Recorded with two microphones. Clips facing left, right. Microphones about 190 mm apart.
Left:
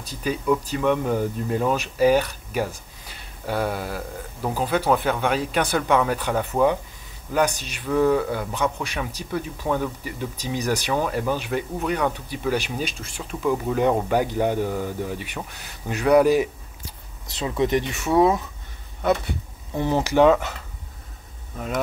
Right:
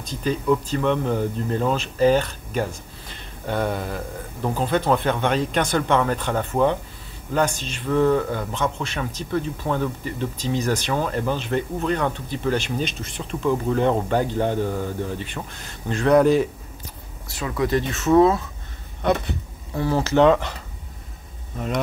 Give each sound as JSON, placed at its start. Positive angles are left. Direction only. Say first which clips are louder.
{"t": 0.0, "sound": "speech", "louder": "right 2 dB", "side_deg": 10}
{"t": 17.4, "sound": "speech", "louder": "even", "side_deg": 20}
{"t": 19.7, "sound": "speech", "louder": "right 1 dB", "side_deg": 15}
{"t": 21.5, "sound": "speech", "louder": "right 1 dB", "side_deg": 0}